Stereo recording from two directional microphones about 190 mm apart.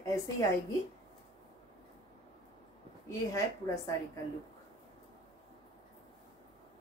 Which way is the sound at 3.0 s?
15° left (ahead or behind).